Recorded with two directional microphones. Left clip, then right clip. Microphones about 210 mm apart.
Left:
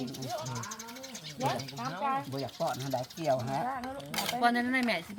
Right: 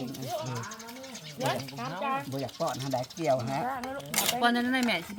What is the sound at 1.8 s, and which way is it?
Speech, 55° right (ahead or behind).